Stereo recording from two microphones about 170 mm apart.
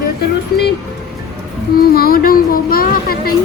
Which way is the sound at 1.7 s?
60° left (ahead or behind).